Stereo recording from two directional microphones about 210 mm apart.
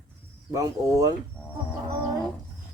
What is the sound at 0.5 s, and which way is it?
Speech, 15° right (ahead or behind).